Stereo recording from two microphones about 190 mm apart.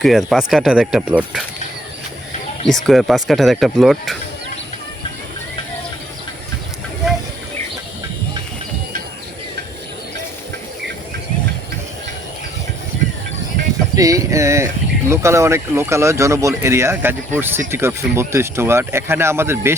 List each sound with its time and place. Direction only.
0.0 s speech: centre (ahead or behind)
2.6 s speech: centre (ahead or behind)
13.9 s music: 20° right (ahead or behind)
15.1 s speech: 15° right (ahead or behind)